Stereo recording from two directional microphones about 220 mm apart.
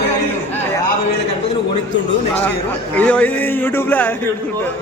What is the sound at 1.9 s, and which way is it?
Speech, 55° left (ahead or behind).